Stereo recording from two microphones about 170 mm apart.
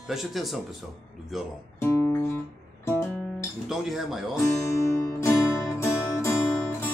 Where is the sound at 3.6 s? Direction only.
Centre (ahead or behind).